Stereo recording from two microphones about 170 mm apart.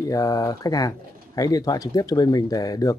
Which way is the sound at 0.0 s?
20° left (ahead or behind).